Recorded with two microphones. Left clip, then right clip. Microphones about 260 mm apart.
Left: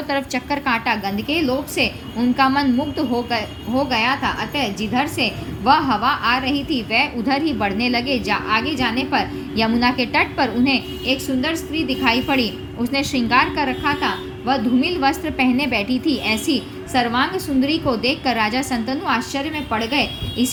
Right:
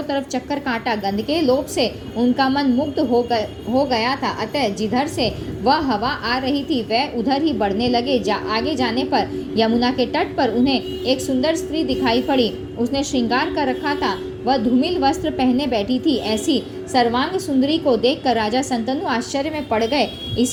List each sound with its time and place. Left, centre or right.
0.1 s a woman's voice: centre
3.0 s a woman's voice: left
3.8 s a woman's voice: centre